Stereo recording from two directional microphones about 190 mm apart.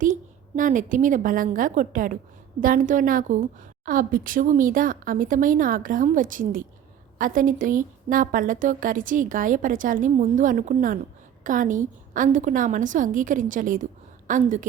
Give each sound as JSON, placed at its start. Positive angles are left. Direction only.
{"t": 0.0, "sound": "a woman's voice", "side_deg": -45}